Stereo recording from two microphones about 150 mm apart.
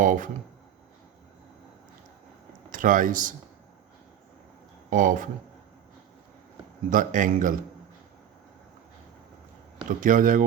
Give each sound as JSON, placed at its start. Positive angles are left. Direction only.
{"t": 0.0, "sound": "speech", "side_deg": -60}
{"t": 2.7, "sound": "speech", "side_deg": -60}
{"t": 4.9, "sound": "speech", "side_deg": -60}
{"t": 6.9, "sound": "speech", "side_deg": -60}
{"t": 10.0, "sound": "speech", "side_deg": -60}